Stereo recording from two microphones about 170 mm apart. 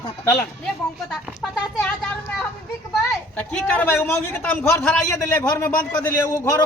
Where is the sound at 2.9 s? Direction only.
10° left (ahead or behind).